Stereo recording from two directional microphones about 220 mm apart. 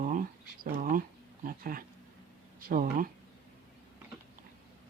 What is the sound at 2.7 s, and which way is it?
Speech, 40° right (ahead or behind).